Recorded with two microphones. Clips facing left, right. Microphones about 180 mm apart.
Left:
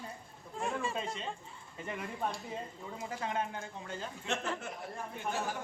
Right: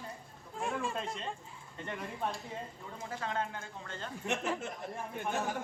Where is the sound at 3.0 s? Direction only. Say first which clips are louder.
Even; 15° left (ahead or behind).